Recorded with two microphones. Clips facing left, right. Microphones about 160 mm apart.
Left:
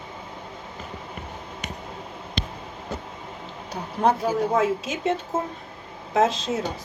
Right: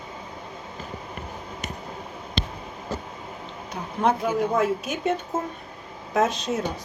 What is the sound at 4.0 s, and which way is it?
A woman's voice, 35° left (ahead or behind).